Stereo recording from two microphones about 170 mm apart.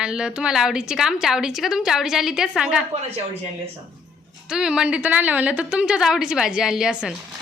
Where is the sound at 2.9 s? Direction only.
40° right (ahead or behind).